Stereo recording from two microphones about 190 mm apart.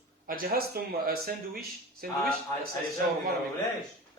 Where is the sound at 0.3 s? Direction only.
50° right (ahead or behind).